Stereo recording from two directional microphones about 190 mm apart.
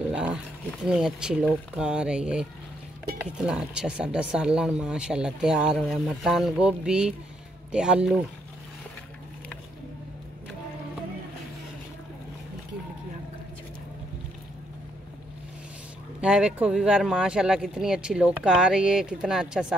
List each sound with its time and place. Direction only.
0.1 s a sound: 5° right (ahead or behind)
0.8 s speech: 5° right (ahead or behind)
16.2 s speech: 5° right (ahead or behind)